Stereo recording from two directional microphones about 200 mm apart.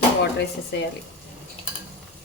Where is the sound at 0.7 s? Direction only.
60° left (ahead or behind).